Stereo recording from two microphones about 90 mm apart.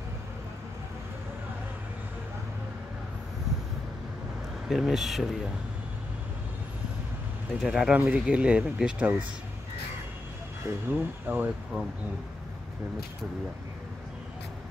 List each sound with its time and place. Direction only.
4.6 s speech: 5° right (ahead or behind)
7.6 s speech: 10° right (ahead or behind)
10.6 s speech: 20° right (ahead or behind)